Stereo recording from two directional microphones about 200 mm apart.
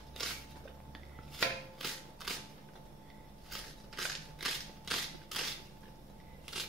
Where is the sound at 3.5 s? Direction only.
Centre (ahead or behind).